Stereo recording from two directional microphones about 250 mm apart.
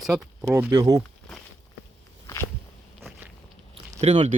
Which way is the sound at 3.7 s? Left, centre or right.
Right.